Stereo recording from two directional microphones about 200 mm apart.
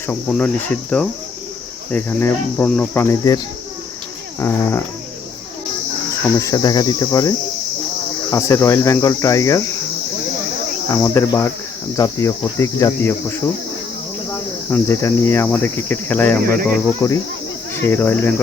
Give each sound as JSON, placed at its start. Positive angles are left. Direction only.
{"t": 0.1, "sound": "cricket", "side_deg": 5}
{"t": 6.4, "sound": "cricket", "side_deg": 15}
{"t": 10.9, "sound": "cricket", "side_deg": 15}
{"t": 16.4, "sound": "speech", "side_deg": -45}
{"t": 17.0, "sound": "cricket", "side_deg": 15}